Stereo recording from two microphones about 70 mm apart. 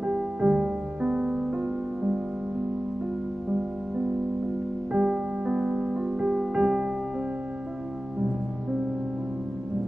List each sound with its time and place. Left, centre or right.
0.0 s music: centre
4.9 s music: centre